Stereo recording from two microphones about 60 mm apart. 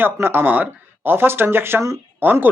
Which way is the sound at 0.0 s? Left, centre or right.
Right.